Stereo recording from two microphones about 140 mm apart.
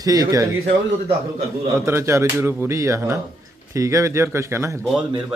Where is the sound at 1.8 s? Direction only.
20° right (ahead or behind).